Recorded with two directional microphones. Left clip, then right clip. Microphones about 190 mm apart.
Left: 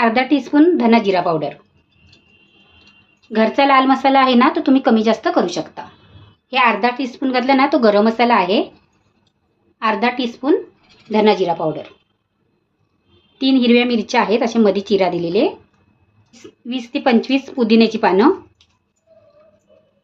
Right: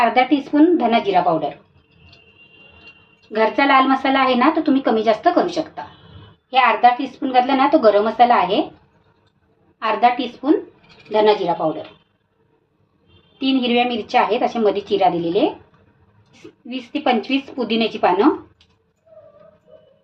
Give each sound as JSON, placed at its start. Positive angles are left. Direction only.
{"t": 0.1, "sound": "speech", "side_deg": 45}
{"t": 3.3, "sound": "speech", "side_deg": 40}
{"t": 6.5, "sound": "speech", "side_deg": 55}
{"t": 9.7, "sound": "speech", "side_deg": 50}
{"t": 13.4, "sound": "speech", "side_deg": 45}
{"t": 16.6, "sound": "speech", "side_deg": 45}